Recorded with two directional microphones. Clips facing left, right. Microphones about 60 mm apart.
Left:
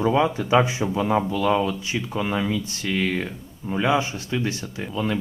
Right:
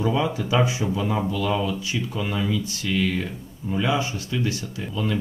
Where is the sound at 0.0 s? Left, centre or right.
Left.